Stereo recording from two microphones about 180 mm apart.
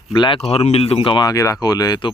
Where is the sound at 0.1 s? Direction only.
25° left (ahead or behind).